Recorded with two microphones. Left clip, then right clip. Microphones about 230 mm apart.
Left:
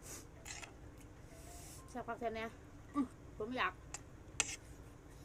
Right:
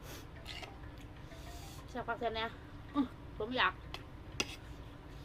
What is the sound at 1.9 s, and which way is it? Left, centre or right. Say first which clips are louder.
A woman's voice: right 5 dB; centre.